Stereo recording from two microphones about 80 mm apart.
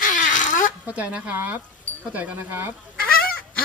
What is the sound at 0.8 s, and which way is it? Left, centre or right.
Speech, centre.